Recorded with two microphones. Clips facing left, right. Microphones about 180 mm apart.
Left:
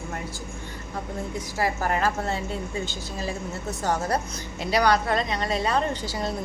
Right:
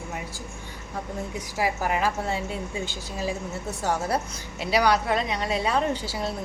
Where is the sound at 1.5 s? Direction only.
10° right (ahead or behind).